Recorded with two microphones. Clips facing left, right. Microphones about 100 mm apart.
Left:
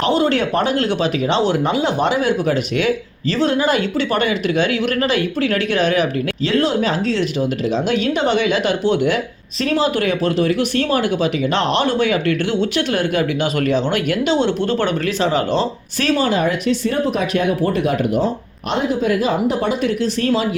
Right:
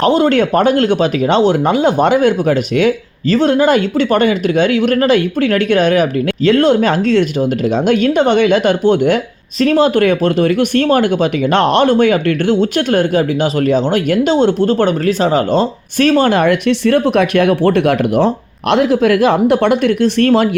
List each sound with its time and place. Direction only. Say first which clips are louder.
0.0 s speech: right 5 dB; 45° right (ahead or behind); by 18.3 s 75° right (ahead or behind)
18.7 s speech: right 7 dB; 85° right; by 20.5 s 60° right (ahead or behind)